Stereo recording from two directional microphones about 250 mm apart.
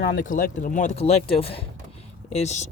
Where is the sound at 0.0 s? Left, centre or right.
Left.